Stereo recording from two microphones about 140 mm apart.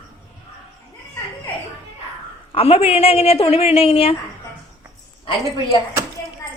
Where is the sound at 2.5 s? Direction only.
45° left (ahead or behind).